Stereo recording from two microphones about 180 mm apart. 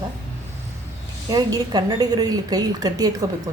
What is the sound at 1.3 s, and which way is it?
A woman's voice, 20° right (ahead or behind).